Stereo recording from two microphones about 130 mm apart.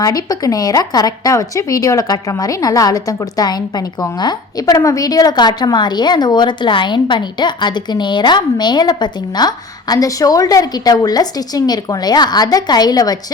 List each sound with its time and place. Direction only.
0.0 s a woman's voice: 30° left (ahead or behind)